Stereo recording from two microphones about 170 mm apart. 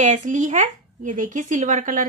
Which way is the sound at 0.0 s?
45° right (ahead or behind).